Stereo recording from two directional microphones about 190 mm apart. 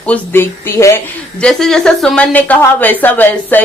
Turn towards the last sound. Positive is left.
turn(degrees=10)  # may be behind; listen again after turning